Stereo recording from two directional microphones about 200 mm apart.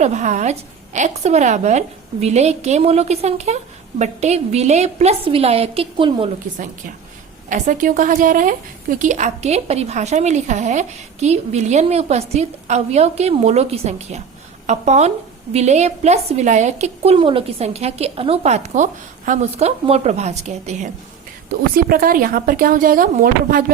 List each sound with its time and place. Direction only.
0.0 s a woman's voice: 35° right (ahead or behind)
7.5 s a woman's voice: 40° right (ahead or behind)
21.5 s speech: 50° right (ahead or behind)